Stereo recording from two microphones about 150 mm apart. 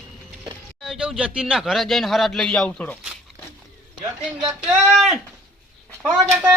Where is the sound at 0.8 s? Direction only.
5° right (ahead or behind); by 3.0 s 10° left (ahead or behind).